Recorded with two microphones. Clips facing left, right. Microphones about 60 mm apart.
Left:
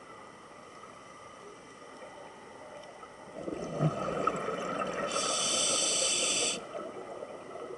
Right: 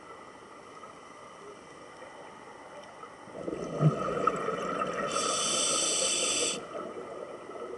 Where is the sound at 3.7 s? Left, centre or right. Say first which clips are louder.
Right 3 dB; centre.